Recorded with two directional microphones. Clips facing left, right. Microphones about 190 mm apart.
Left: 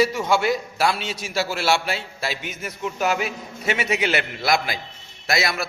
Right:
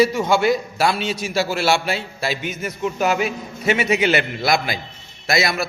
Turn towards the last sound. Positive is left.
turn(degrees=0)  # may be behind; listen again after turning